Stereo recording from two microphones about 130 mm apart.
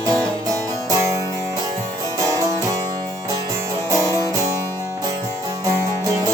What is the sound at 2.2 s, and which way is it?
Music, 25° right (ahead or behind).